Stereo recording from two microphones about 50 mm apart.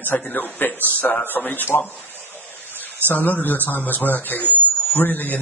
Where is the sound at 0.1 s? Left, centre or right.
Left.